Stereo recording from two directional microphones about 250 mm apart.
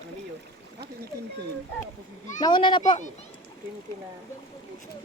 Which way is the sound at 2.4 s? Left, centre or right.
Centre.